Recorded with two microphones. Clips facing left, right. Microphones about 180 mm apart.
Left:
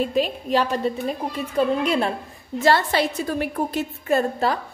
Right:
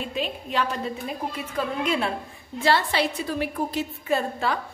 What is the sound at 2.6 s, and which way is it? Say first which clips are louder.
A woman's voice: left 3 dB; 45° left (ahead or behind).